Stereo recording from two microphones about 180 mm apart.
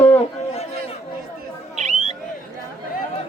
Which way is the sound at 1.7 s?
40° right (ahead or behind).